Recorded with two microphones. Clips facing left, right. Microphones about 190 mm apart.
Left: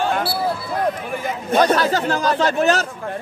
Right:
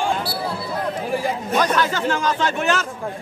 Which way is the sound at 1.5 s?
30° left (ahead or behind).